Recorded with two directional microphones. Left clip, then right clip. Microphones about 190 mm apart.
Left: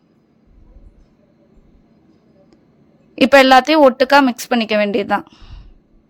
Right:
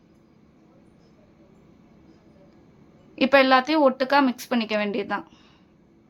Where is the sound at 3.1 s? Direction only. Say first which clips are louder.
Left 8 dB; 40° left (ahead or behind).